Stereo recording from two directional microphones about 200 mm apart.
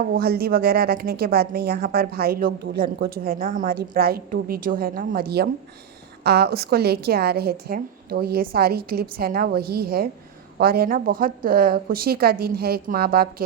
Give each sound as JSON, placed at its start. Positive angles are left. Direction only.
{"t": 0.0, "sound": "a woman's voice", "side_deg": -50}